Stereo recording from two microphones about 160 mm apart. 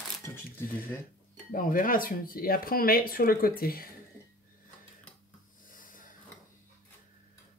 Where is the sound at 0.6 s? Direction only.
65° left (ahead or behind).